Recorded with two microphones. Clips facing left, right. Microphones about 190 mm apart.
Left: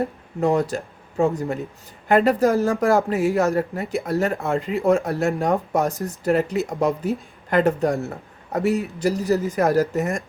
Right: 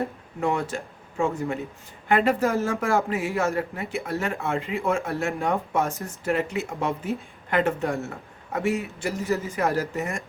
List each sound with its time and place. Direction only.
0.3 s speech: 40° left (ahead or behind)